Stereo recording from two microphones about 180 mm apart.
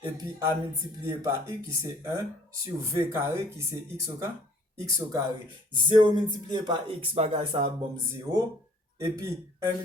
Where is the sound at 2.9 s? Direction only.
15° right (ahead or behind).